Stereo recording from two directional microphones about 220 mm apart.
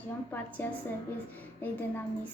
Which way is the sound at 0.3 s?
10° left (ahead or behind).